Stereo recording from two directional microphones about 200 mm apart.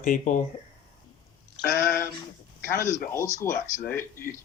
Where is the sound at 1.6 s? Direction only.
20° left (ahead or behind).